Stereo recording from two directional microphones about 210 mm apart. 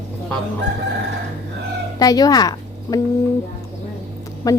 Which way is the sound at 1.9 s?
15° left (ahead or behind).